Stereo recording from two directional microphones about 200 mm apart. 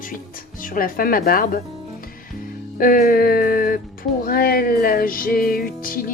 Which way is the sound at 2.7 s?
45° left (ahead or behind).